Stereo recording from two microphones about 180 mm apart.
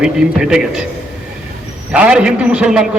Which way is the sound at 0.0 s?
5° right (ahead or behind).